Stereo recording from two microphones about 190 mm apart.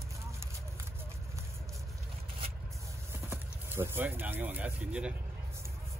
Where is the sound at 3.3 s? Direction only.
10° right (ahead or behind).